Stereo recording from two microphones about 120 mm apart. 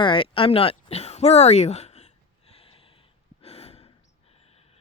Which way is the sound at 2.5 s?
55° left (ahead or behind).